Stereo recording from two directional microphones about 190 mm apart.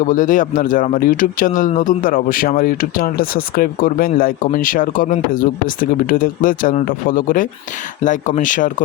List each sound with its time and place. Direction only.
0.0 s speech: 45° left (ahead or behind)